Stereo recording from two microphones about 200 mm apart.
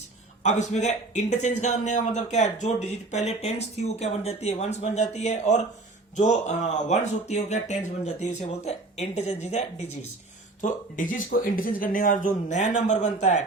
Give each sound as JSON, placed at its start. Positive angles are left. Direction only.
{"t": 0.4, "sound": "a man's voice", "side_deg": 35}